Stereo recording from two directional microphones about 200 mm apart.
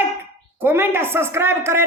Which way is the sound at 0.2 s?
10° right (ahead or behind).